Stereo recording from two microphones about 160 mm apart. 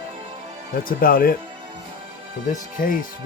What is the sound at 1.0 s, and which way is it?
Speech, 65° left (ahead or behind).